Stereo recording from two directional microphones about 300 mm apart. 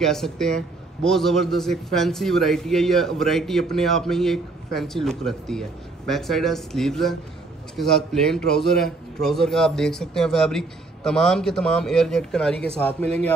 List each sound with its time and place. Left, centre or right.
0.0 s a man's voice: centre